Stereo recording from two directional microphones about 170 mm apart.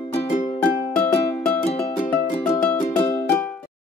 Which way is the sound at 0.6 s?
10° left (ahead or behind).